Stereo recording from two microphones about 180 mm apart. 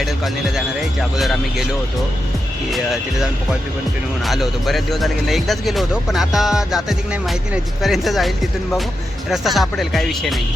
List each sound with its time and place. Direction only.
1.1 s speech: centre (ahead or behind)
2.6 s speech: centre (ahead or behind)
4.2 s speech: centre (ahead or behind)
9.3 s speech: centre (ahead or behind)